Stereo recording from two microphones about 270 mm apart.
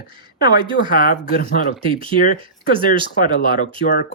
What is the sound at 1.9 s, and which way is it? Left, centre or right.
Speech, centre.